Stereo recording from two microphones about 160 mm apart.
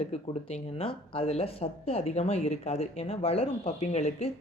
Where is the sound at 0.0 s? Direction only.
40° left (ahead or behind).